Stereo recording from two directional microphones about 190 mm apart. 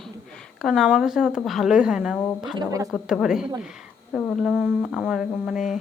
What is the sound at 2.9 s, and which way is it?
Speech, centre (ahead or behind).